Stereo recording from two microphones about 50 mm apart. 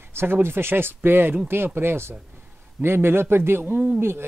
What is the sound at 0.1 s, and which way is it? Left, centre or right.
A man's voice, right.